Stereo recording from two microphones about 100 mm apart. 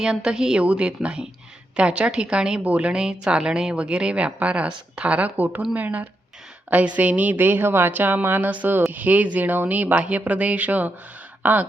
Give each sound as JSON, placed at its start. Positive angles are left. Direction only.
{"t": 0.0, "sound": "a woman's voice", "side_deg": -10}